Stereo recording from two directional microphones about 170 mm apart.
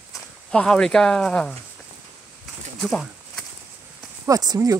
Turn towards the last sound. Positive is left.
turn(degrees=-20)  # may be behind; listen again after turning